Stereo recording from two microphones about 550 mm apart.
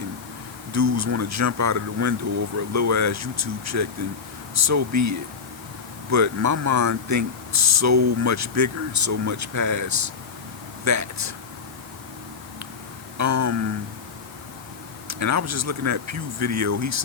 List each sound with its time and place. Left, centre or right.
0.7 s speech: right
13.1 s a sound: right
15.0 s speech: right